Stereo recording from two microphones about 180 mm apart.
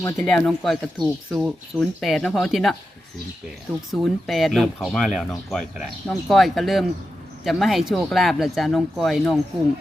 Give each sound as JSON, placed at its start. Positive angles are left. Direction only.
{"t": 0.0, "sound": "speech", "side_deg": 15}
{"t": 0.3, "sound": "speech", "side_deg": 5}
{"t": 3.9, "sound": "speech", "side_deg": 0}